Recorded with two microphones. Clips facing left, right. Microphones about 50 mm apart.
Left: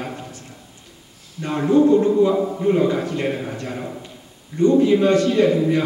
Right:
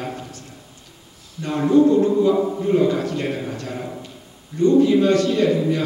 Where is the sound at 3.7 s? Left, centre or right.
Centre.